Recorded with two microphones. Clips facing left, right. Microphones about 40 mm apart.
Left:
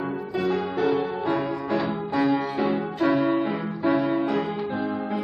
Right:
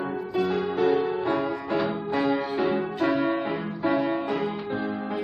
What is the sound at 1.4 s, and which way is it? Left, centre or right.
Music, centre.